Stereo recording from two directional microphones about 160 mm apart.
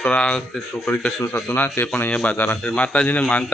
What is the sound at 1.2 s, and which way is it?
A man's voice, 20° left (ahead or behind).